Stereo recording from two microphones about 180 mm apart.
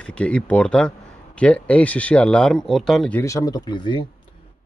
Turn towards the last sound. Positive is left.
turn(degrees=25)  # may be behind; listen again after turning